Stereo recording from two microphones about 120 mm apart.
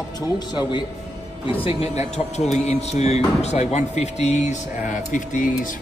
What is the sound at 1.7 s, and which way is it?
Speech, 60° left (ahead or behind).